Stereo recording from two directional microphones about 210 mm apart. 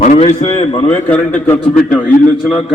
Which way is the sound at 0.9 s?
10° left (ahead or behind).